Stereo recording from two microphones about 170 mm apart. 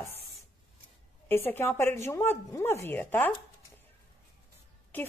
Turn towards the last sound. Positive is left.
turn(degrees=10)  # may be behind; listen again after turning